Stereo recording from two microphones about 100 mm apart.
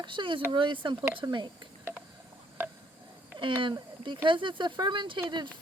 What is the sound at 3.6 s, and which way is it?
Speech, 55° right (ahead or behind).